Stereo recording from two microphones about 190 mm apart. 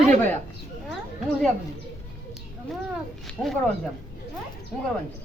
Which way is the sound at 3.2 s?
Centre (ahead or behind).